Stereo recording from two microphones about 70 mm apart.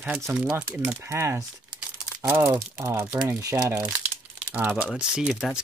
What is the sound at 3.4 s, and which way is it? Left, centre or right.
Speech, right.